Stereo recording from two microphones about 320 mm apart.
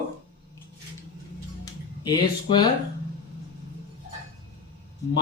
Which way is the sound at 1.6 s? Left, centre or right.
Centre.